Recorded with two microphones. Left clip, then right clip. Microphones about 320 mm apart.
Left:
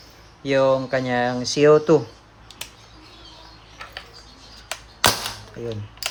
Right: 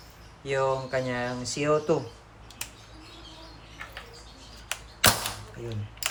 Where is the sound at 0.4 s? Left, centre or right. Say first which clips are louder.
Left 8 dB; left.